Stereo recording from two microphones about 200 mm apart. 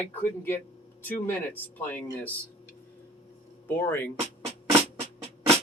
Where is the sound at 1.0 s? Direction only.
10° left (ahead or behind).